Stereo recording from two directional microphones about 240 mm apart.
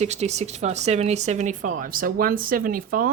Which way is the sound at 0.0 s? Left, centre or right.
Right.